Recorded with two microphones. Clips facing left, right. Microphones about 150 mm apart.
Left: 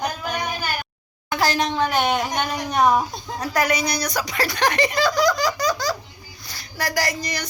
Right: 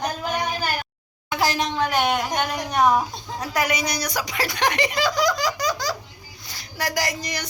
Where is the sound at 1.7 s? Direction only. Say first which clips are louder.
Left 1 dB; centre (ahead or behind).